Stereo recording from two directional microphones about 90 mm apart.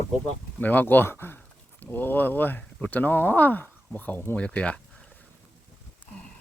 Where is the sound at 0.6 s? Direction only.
20° left (ahead or behind).